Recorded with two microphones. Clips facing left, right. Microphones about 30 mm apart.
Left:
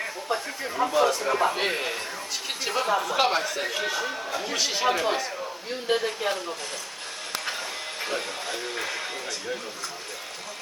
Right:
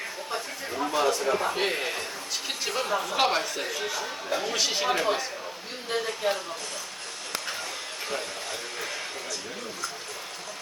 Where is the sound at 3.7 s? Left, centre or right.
Left.